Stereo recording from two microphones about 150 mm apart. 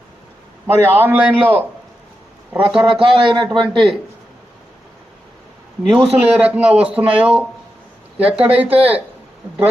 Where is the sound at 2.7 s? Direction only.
5° right (ahead or behind).